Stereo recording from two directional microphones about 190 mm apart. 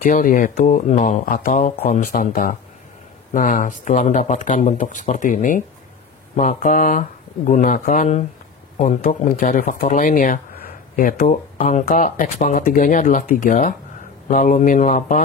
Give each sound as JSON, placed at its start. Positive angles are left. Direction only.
{"t": 0.0, "sound": "speech", "side_deg": 45}